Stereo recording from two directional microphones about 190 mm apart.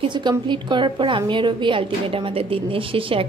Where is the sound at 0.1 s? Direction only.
25° right (ahead or behind).